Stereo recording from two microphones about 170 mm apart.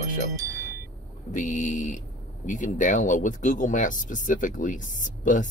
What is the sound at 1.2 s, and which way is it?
Speech, 45° left (ahead or behind).